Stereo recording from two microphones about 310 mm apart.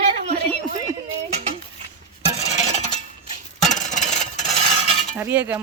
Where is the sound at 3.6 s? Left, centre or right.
Left.